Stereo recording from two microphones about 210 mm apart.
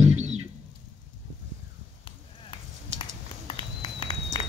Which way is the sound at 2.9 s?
25° left (ahead or behind).